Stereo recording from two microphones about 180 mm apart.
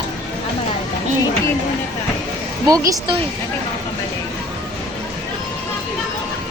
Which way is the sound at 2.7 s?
20° right (ahead or behind).